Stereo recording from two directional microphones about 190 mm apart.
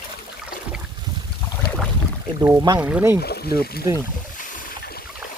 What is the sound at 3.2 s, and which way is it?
Speech, 55° left (ahead or behind).